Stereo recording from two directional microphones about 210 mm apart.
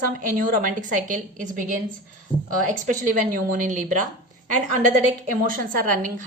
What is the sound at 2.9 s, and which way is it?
A woman's voice, 40° right (ahead or behind).